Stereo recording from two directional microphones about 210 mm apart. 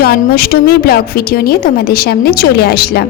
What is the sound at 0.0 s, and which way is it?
A woman's voice, 45° left (ahead or behind).